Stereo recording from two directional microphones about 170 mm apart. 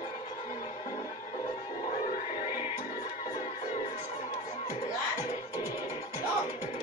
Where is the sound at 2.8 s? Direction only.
45° left (ahead or behind).